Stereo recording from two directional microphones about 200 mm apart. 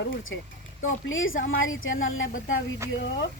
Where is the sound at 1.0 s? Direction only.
80° left.